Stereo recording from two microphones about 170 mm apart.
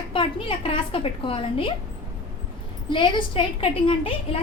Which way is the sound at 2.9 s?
30° left (ahead or behind).